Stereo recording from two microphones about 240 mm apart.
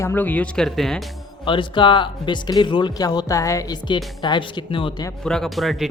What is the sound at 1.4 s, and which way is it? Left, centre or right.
Speech, left.